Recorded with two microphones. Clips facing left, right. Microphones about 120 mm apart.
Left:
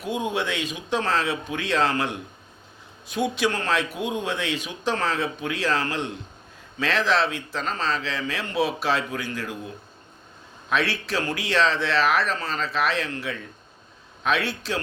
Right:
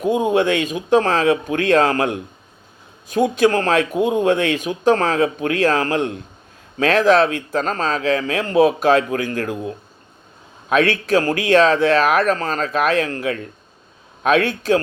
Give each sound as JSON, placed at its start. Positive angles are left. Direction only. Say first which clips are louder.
{"t": 0.0, "sound": "speech", "louder": "right 10 dB", "side_deg": -45}
{"t": 10.7, "sound": "speech", "louder": "right 9 dB", "side_deg": -50}